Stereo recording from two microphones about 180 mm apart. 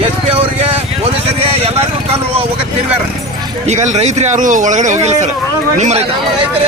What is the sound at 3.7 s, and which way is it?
Speech, 40° right (ahead or behind).